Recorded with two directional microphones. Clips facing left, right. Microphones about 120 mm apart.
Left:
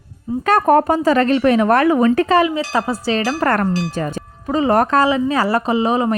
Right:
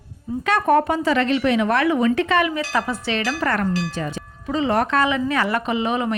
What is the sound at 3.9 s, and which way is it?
Speech, 50° left (ahead or behind).